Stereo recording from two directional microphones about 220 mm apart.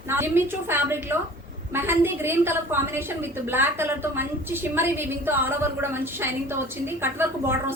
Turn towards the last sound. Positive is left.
turn(degrees=-10)  # may be behind; listen again after turning